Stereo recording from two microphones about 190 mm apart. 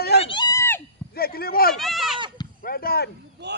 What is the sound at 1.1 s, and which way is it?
Speech, 55° left (ahead or behind).